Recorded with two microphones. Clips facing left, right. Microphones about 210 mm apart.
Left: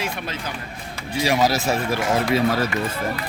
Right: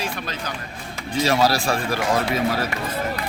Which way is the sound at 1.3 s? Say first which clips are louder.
Even; 20° left (ahead or behind).